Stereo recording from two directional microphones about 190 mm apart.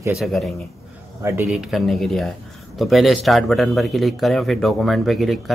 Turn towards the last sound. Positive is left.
turn(degrees=0)  # may be behind; listen again after turning